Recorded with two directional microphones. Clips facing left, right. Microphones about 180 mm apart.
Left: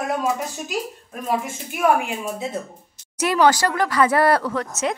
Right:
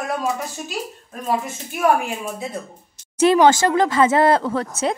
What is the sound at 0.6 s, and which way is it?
Speech, 10° left (ahead or behind).